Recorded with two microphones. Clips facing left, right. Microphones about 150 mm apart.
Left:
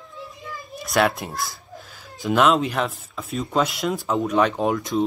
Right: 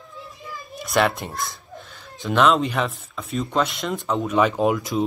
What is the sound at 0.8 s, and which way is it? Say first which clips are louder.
Speech: even; centre (ahead or behind).